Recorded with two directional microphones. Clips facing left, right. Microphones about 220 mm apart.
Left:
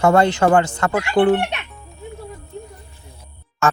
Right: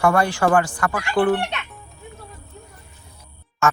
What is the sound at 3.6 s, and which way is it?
Music, 30° left (ahead or behind).